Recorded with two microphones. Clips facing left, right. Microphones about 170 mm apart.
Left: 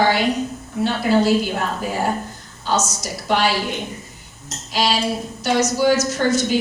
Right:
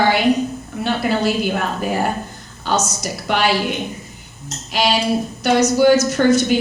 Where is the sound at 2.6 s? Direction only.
60° right (ahead or behind).